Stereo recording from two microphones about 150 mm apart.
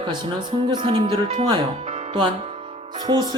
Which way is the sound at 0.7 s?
35° right (ahead or behind).